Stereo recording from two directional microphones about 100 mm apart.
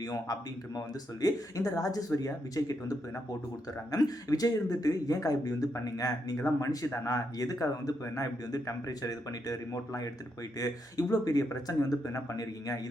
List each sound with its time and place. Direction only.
0.0 s speech: 40° left (ahead or behind)
3.9 s speech: 40° left (ahead or behind)